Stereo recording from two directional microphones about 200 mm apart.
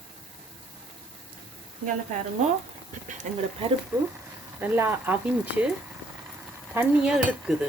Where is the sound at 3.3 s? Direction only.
35° right (ahead or behind).